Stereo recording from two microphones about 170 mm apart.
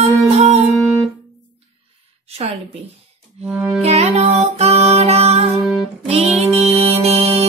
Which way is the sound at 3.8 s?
40° right (ahead or behind).